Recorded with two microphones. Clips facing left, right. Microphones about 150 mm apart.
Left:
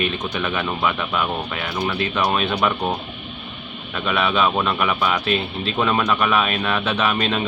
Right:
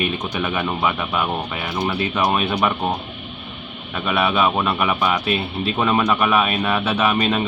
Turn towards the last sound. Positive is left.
turn(degrees=-10)  # may be behind; listen again after turning